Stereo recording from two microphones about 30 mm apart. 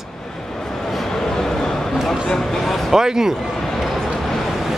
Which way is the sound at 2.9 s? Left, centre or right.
Centre.